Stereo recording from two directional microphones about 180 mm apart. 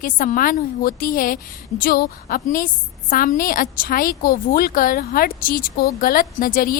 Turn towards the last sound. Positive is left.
turn(degrees=55)  # may be behind; listen again after turning